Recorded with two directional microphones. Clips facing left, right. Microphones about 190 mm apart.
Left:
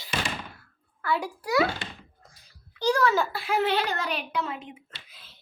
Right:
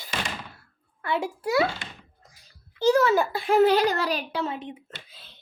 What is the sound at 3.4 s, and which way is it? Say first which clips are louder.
A child's voice: right 10 dB; 40° right (ahead or behind).